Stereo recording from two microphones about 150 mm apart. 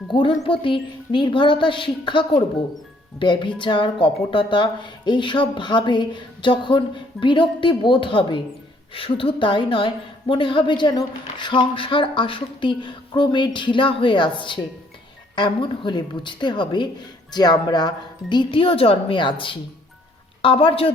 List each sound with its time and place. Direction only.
0.1 s a woman's voice: 35° left (ahead or behind)